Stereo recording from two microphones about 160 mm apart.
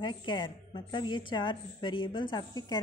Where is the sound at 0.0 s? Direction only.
30° left (ahead or behind).